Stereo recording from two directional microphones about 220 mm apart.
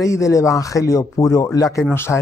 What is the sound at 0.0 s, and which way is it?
Speech, 15° left (ahead or behind).